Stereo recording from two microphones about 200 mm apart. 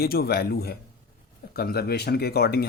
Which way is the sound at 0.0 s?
50° left (ahead or behind).